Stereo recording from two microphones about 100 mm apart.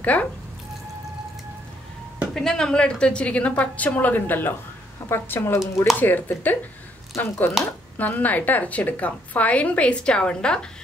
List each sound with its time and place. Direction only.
0.0 s speech: 15° left (ahead or behind)
2.3 s a woman's voice: 5° left (ahead or behind)